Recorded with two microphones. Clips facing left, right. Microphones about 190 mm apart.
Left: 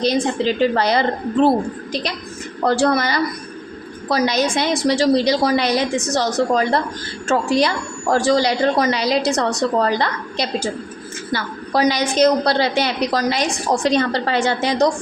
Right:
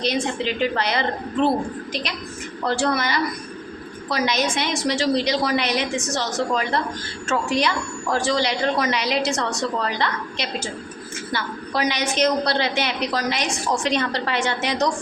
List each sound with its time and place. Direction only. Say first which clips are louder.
0.0 s a woman's voice: left 5 dB; 35° left (ahead or behind)
2.6 s a woman's voice: left 5 dB; 40° left (ahead or behind)